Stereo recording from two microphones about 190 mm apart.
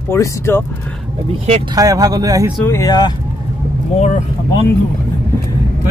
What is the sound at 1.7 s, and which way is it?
Speech, 20° right (ahead or behind).